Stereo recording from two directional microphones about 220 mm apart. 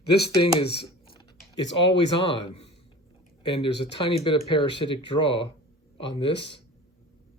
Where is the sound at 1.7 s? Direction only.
25° left (ahead or behind).